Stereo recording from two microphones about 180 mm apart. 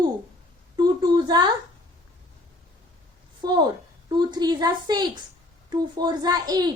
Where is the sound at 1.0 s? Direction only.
25° right (ahead or behind).